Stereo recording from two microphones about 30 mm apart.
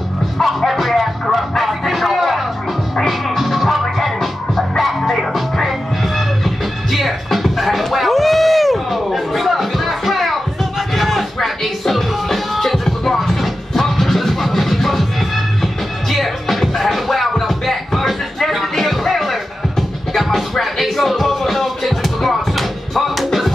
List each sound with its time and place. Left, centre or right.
0.4 s music: centre
20.3 s music: centre